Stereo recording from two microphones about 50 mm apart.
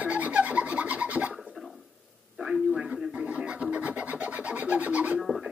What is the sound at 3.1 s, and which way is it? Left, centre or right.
Filing, right.